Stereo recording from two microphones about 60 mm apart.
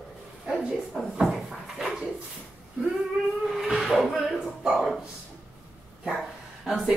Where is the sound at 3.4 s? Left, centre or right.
Centre.